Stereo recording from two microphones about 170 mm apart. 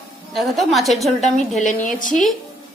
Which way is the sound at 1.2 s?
50° left (ahead or behind).